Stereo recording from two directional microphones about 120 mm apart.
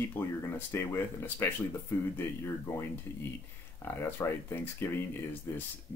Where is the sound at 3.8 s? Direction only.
15° left (ahead or behind).